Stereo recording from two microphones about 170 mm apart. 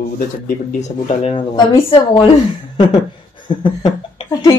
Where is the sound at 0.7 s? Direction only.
45° left (ahead or behind).